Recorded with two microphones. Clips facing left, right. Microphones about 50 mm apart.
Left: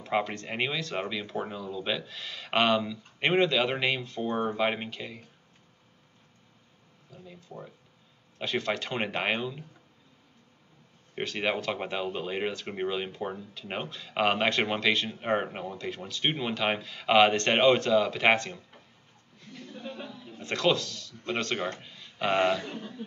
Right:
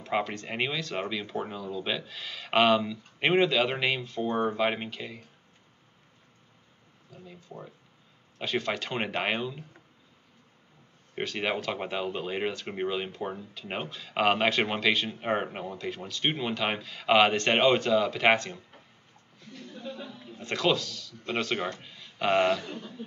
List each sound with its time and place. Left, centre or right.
0.0 s speech: centre
7.1 s speech: centre
11.1 s speech: centre
19.7 s a sound: left
20.1 s speech: centre
22.7 s a man's voice: left